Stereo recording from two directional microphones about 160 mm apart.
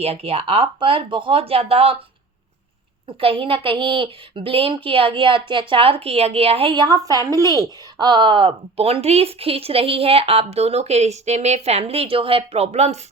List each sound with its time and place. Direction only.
0.0 s speech: 40° right (ahead or behind)
3.1 s speech: 35° right (ahead or behind)